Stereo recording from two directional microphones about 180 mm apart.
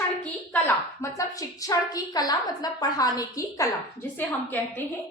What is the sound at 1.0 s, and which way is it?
A woman's voice, 20° left (ahead or behind).